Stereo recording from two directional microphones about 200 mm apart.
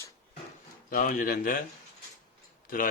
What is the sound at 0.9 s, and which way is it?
Speech, 45° left (ahead or behind).